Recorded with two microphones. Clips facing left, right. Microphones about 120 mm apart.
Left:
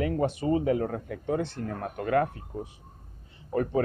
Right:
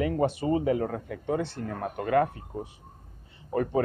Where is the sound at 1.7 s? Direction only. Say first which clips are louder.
Right 1 dB; 20° right (ahead or behind).